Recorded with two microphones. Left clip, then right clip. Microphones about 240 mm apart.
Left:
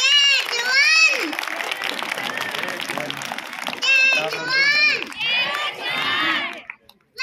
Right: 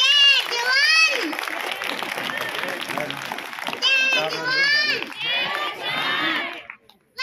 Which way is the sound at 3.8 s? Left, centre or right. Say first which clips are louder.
Left 3 dB; centre.